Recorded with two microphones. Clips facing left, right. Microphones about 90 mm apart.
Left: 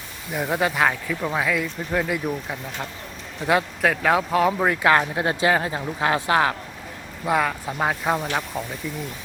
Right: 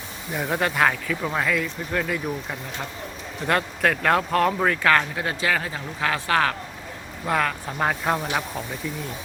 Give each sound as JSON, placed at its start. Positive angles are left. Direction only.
{"t": 0.3, "sound": "speech", "side_deg": 0}
{"t": 4.7, "sound": "speech", "side_deg": 15}
{"t": 7.3, "sound": "speech", "side_deg": 5}